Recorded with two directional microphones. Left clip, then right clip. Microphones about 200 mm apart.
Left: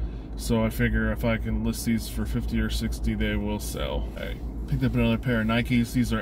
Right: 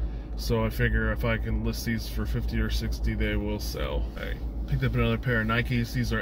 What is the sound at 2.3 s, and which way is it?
Speech, 35° right (ahead or behind).